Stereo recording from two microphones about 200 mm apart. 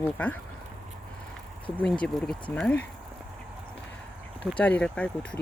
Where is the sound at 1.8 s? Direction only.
5° left (ahead or behind).